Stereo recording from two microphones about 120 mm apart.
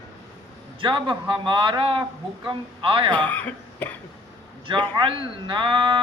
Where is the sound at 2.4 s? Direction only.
45° right (ahead or behind).